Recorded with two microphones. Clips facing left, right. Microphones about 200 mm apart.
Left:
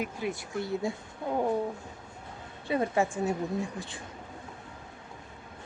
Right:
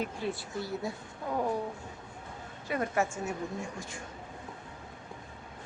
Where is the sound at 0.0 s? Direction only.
10° left (ahead or behind).